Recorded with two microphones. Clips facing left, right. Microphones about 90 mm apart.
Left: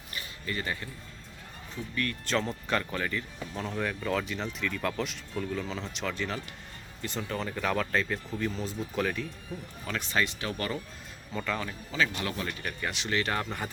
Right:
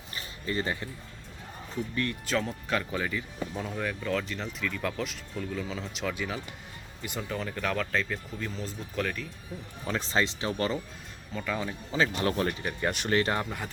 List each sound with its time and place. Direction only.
0.1 s music: 30° right (ahead or behind)
2.2 s speech: 5° right (ahead or behind)
9.8 s speech: 30° right (ahead or behind)
11.3 s speech: 10° right (ahead or behind)
11.9 s speech: 30° right (ahead or behind)
12.5 s speech: 20° right (ahead or behind)
12.9 s speech: 45° right (ahead or behind)